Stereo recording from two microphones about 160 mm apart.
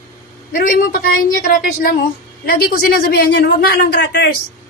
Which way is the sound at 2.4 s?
70° left (ahead or behind).